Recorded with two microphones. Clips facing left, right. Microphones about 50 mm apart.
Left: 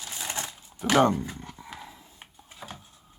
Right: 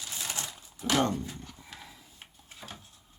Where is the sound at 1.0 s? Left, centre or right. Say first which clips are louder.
Left 6 dB; centre.